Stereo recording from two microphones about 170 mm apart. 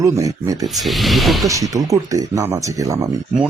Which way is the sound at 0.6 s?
Centre (ahead or behind).